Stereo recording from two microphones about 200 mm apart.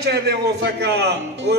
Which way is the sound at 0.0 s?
55° right (ahead or behind).